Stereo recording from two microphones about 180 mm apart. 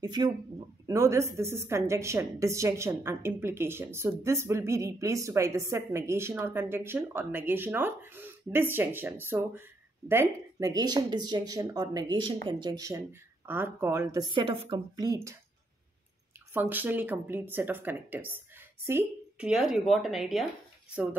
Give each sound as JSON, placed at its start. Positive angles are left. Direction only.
{"t": 0.0, "sound": "a woman's voice", "side_deg": -25}
{"t": 16.5, "sound": "a woman's voice", "side_deg": -10}